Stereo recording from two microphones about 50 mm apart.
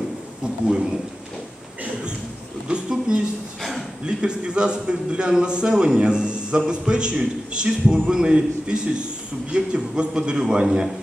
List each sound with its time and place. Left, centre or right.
0.7 s a man's voice: centre
2.7 s a sound: right
4.0 s a man's voice: centre